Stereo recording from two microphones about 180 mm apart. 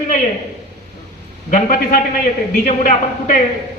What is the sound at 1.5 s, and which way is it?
A man's voice, 45° left (ahead or behind).